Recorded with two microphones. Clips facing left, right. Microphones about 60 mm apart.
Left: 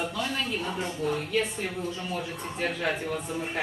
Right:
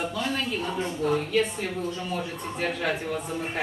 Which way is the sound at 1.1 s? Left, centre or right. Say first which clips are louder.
Right 3 dB; centre.